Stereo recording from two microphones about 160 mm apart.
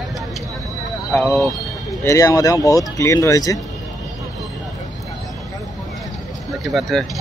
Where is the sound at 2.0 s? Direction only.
20° left (ahead or behind).